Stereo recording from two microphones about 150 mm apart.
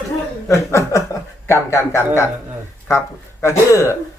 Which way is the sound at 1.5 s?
20° left (ahead or behind).